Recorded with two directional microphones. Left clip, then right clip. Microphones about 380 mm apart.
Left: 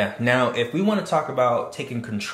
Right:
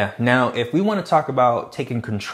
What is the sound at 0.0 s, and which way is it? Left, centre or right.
Speech, right.